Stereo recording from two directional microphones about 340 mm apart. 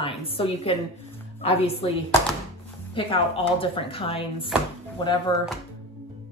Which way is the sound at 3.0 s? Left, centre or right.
Centre.